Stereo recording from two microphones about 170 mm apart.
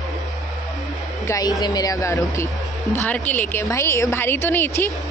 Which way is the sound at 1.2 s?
20° left (ahead or behind).